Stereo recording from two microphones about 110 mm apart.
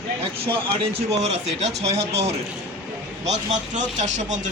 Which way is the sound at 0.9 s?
85° right.